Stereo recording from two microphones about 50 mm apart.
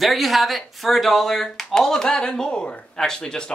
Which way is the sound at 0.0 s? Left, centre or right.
Centre.